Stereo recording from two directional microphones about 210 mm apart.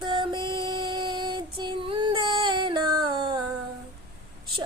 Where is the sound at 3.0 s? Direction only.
20° right (ahead or behind).